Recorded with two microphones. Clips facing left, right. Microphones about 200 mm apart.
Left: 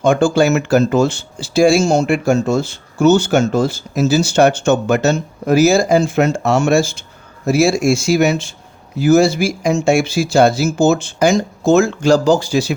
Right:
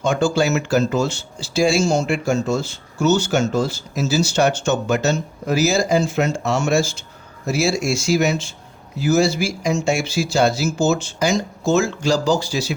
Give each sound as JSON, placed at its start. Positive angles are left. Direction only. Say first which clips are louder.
{"t": 0.0, "sound": "speech", "louder": "left 5 dB", "side_deg": 50}